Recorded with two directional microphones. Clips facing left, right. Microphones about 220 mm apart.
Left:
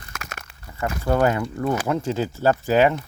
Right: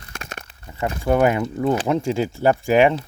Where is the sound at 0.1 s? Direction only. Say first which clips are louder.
Right 3 dB; 30° right (ahead or behind).